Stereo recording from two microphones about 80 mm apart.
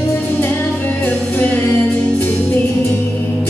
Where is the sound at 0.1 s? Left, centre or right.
Left.